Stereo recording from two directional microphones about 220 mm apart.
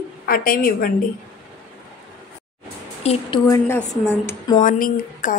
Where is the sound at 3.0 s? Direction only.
30° left (ahead or behind).